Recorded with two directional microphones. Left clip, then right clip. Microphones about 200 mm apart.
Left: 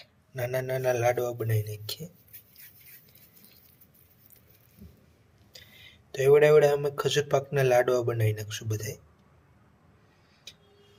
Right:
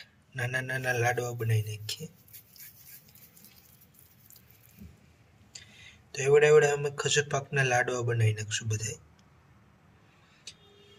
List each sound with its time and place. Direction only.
0.0 s speech: 35° left (ahead or behind)
5.5 s speech: 40° left (ahead or behind)